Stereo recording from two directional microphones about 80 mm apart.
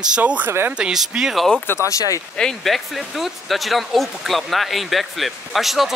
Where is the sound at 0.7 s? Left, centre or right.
Centre.